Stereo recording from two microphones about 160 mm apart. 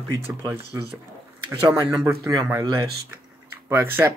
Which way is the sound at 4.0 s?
10° right (ahead or behind).